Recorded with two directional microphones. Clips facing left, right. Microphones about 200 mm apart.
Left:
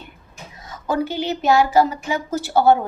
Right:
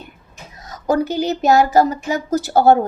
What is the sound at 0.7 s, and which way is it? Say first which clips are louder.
A woman's voice: right 4 dB; 40° right (ahead or behind).